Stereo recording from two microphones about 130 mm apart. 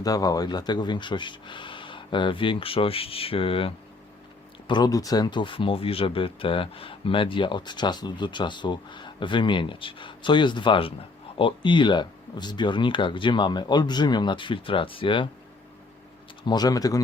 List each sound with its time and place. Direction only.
0.0 s speech: 30° left (ahead or behind); by 3.7 s 45° left (ahead or behind)
4.7 s speech: 30° left (ahead or behind)
16.5 s speech: 30° left (ahead or behind)